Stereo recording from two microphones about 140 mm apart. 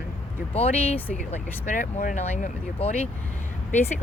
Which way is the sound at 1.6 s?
60° left (ahead or behind).